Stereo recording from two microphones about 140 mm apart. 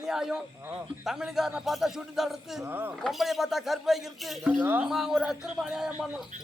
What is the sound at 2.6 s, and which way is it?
Speech, 15° right (ahead or behind).